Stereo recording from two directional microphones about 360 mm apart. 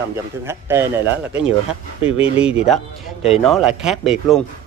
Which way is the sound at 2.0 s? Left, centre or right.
Centre.